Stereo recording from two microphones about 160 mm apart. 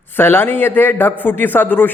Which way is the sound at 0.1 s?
15° left (ahead or behind).